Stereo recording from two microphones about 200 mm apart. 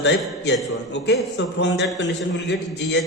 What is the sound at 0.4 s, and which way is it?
A man's voice, 55° left (ahead or behind).